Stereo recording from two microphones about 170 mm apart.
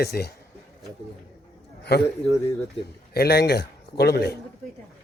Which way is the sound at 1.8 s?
70° left (ahead or behind).